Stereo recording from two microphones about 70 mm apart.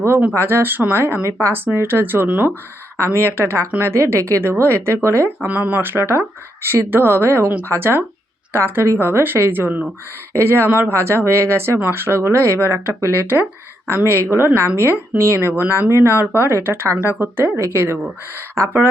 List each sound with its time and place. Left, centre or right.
0.3 s speech: right
3.0 s speech: right
5.5 s speech: right
15.9 s speech: right